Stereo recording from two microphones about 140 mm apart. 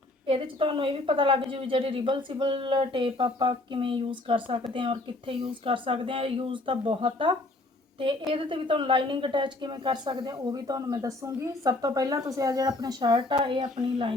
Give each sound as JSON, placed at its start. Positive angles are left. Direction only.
{"t": 0.3, "sound": "a woman's voice", "side_deg": -40}